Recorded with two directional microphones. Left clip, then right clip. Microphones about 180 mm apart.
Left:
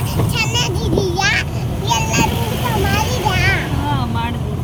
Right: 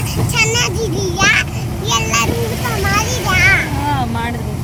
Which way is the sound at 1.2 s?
15° right (ahead or behind).